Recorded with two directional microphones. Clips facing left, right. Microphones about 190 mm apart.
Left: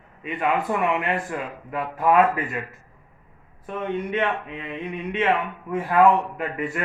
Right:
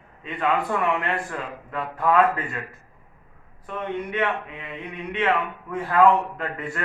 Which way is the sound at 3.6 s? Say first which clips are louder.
Left 2 dB; 20° left (ahead or behind).